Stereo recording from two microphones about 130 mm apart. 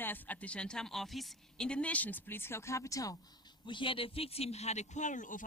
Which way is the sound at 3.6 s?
40° left (ahead or behind).